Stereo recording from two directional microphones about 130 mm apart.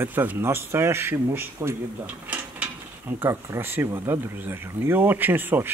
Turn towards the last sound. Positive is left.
turn(degrees=-15)  # may be behind; listen again after turning